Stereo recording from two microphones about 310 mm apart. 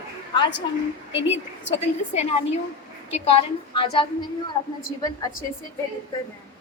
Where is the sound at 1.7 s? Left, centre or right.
Left.